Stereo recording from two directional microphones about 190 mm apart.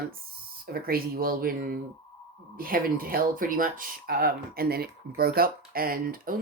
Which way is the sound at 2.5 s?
50° right (ahead or behind).